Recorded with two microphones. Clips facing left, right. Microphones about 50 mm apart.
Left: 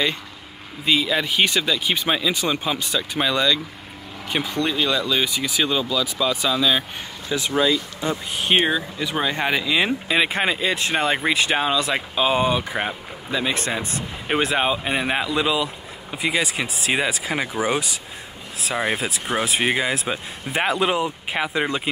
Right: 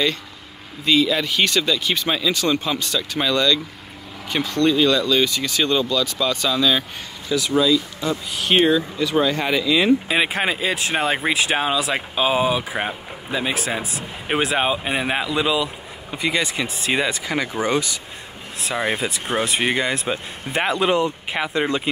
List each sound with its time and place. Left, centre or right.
0.8 s speech: centre
7.2 s speech: left
10.0 s speech: centre
19.0 s speech: centre